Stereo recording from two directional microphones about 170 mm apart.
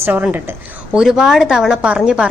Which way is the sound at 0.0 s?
10° right (ahead or behind).